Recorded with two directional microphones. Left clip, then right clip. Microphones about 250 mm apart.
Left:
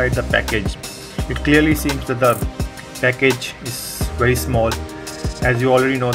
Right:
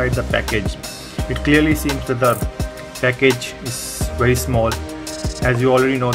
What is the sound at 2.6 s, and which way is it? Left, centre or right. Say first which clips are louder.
Music: left 1 dB; centre.